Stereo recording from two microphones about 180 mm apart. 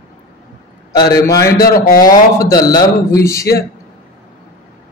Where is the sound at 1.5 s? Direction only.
55° left (ahead or behind).